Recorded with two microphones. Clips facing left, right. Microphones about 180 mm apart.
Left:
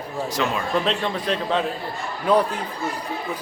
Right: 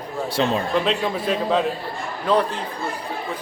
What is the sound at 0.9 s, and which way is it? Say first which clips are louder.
Speech: right 2 dB; 5° right (ahead or behind).